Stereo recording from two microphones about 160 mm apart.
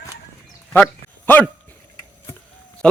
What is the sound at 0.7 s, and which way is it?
Dog, 10° left (ahead or behind).